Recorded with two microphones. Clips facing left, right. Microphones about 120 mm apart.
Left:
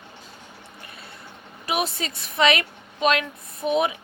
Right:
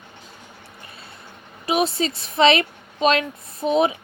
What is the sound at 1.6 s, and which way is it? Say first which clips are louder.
A woman's voice: right 5 dB; 25° right (ahead or behind).